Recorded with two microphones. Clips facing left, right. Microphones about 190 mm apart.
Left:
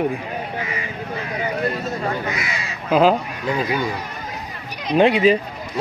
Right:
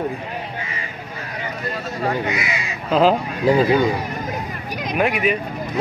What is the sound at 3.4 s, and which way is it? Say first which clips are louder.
Speech: right 8 dB; 30° right (ahead or behind).